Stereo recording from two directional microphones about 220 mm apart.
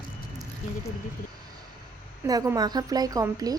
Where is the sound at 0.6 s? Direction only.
35° left (ahead or behind).